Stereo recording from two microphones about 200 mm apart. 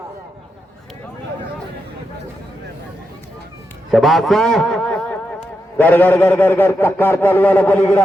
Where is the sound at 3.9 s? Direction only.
Centre (ahead or behind).